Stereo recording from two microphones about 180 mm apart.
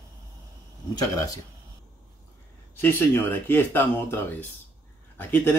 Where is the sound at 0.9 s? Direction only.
20° left (ahead or behind).